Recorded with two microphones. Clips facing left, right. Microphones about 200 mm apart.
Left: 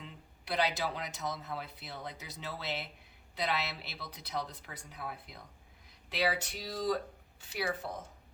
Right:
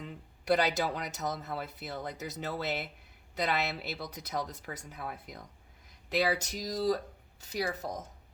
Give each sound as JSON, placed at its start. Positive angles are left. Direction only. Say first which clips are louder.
{"t": 0.0, "sound": "speech", "louder": "right 6 dB", "side_deg": -45}